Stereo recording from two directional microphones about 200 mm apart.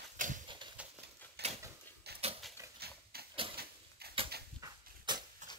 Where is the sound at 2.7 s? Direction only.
50° right (ahead or behind).